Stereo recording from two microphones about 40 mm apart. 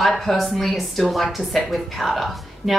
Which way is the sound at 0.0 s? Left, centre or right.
Centre.